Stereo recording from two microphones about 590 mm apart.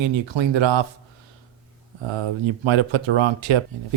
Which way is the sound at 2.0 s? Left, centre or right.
Right.